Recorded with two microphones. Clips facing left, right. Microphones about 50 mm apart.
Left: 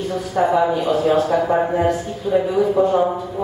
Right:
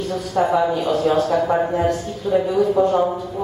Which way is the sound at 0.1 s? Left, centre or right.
Centre.